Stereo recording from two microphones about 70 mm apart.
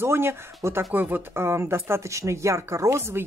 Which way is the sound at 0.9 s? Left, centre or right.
Right.